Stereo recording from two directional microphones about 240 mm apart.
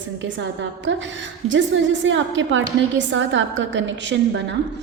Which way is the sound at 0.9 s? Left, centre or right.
Right.